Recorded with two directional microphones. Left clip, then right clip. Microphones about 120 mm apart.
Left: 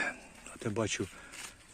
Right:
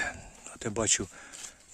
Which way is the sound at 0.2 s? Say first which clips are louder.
Right 2 dB; 30° right (ahead or behind).